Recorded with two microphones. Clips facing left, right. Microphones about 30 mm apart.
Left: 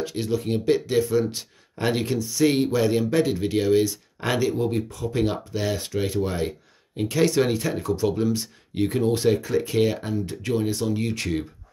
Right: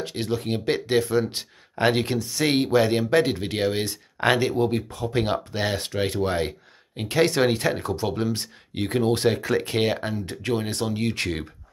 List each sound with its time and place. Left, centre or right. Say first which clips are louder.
0.0 s speech: left 1 dB; right